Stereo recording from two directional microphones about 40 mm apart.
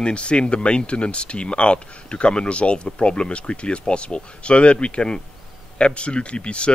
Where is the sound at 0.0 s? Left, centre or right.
Left.